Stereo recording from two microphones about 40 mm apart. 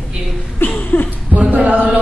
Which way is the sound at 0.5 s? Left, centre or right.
Left.